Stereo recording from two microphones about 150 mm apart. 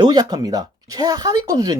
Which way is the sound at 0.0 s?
25° right (ahead or behind).